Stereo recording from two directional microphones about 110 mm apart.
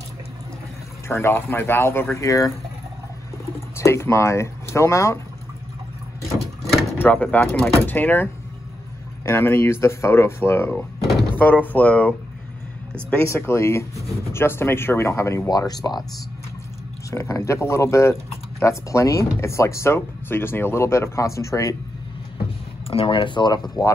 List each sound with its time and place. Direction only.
1.0 s speech: 25° left (ahead or behind)
3.7 s speech: 25° left (ahead or behind)
7.0 s speech: 15° left (ahead or behind)
13.2 s speech: 25° left (ahead or behind)
17.1 s speech: 25° left (ahead or behind)
22.8 s speech: 55° left (ahead or behind)